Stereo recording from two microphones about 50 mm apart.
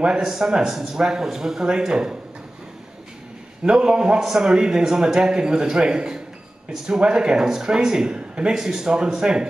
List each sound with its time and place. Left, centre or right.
0.0 s speech: centre
3.6 s speech: centre